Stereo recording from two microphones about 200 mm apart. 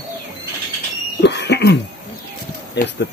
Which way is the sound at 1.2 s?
60° left (ahead or behind).